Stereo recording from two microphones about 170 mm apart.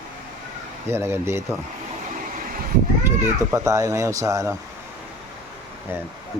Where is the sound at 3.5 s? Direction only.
20° right (ahead or behind).